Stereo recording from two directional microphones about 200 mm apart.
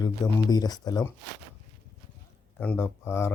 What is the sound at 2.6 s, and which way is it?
Speech, 10° left (ahead or behind).